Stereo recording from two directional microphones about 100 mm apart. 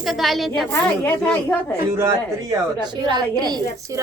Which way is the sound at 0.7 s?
20° left (ahead or behind).